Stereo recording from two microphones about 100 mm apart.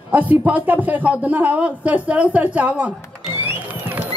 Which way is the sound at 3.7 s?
15° right (ahead or behind).